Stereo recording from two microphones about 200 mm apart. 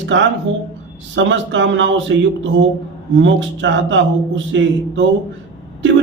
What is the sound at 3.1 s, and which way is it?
Speech, 65° right (ahead or behind).